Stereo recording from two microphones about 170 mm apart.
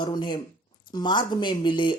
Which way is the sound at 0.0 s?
25° left (ahead or behind).